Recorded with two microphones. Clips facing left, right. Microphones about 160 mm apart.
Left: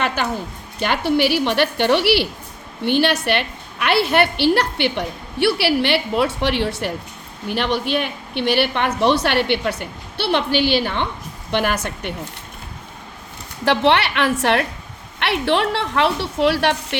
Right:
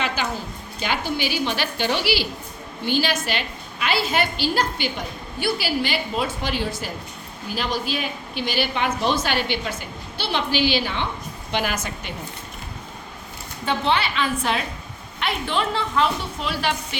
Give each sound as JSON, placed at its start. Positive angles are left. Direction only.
{"t": 0.2, "sound": "a woman's voice", "side_deg": 60}
{"t": 13.7, "sound": "a woman's voice", "side_deg": 75}